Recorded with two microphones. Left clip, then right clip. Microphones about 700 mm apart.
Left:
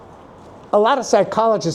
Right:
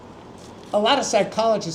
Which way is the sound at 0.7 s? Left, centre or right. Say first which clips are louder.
Left 4 dB; left.